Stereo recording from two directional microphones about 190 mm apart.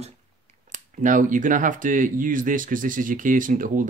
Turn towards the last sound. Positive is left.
turn(degrees=-45)  # may be behind; listen again after turning